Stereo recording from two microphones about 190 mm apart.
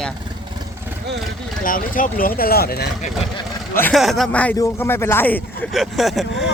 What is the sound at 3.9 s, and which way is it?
Speech, centre (ahead or behind).